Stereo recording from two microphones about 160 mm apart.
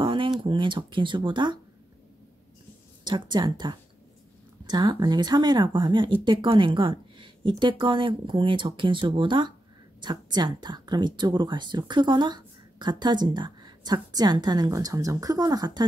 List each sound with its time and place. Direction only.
0.0 s a sound: 30° right (ahead or behind)
0.4 s speech: 30° right (ahead or behind)
3.0 s a woman's voice: 25° right (ahead or behind)